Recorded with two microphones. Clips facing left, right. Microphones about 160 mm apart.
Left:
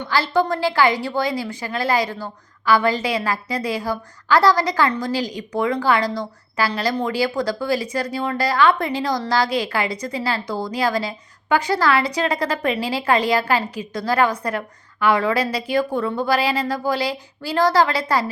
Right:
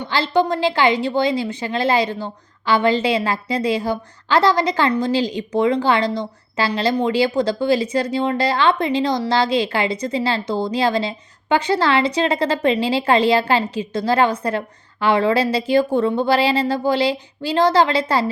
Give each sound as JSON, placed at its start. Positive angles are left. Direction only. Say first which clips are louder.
{"t": 0.1, "sound": "a woman's voice", "louder": "right 1 dB", "side_deg": -20}